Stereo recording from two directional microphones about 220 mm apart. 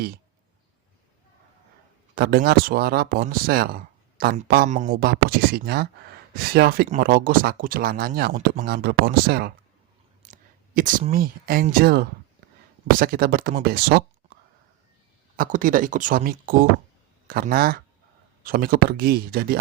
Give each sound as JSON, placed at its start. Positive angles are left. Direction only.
{"t": 2.1, "sound": "speech", "side_deg": -45}
{"t": 15.4, "sound": "speech", "side_deg": -40}